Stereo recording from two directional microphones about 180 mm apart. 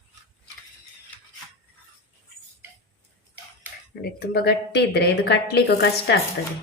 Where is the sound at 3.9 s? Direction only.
60° left (ahead or behind).